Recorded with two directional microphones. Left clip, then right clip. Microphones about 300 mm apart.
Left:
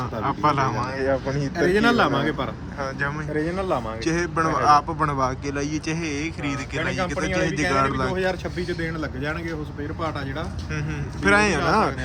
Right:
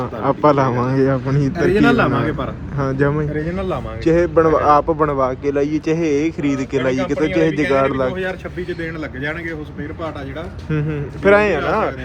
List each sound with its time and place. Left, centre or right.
0.0 s a man's voice: centre
1.5 s speech: left
3.0 s a man's voice: centre
3.3 s speech: left
4.0 s a man's voice: centre
8.1 s speech: left
10.7 s a man's voice: centre